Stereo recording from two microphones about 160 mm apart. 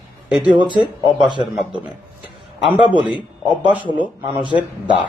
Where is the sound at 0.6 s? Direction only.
30° right (ahead or behind).